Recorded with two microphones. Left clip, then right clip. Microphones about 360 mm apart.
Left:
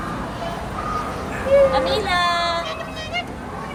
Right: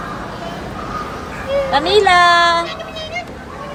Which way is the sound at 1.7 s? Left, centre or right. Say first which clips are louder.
Right 8 dB; right.